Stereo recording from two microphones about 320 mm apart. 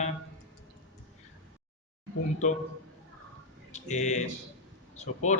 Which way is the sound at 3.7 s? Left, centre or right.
Left.